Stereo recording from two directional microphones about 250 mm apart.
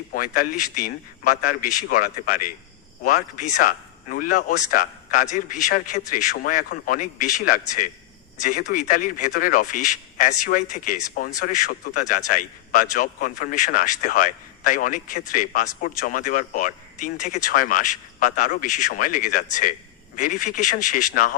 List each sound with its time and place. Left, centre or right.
0.1 s speech: left